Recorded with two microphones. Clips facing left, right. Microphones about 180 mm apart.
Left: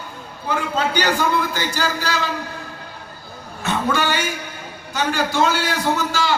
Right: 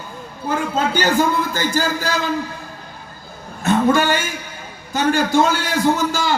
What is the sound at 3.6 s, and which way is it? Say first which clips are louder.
A man's voice: right 6 dB; 50° right (ahead or behind).